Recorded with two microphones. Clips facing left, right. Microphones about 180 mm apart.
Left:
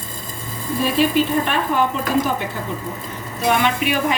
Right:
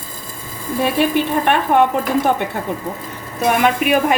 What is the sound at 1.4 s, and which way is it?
Speech, 60° right (ahead or behind).